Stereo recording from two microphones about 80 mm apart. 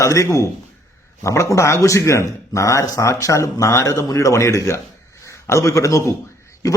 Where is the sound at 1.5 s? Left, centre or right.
Left.